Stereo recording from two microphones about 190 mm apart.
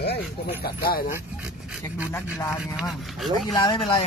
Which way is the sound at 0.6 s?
50° left (ahead or behind).